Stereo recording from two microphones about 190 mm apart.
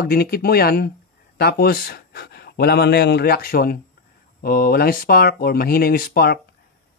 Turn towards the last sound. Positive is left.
turn(degrees=55)  # may be behind; listen again after turning